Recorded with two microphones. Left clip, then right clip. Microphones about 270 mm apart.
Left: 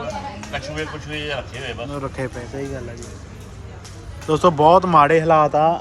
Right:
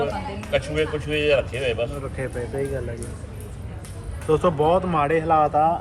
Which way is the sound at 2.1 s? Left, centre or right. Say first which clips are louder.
Even; centre.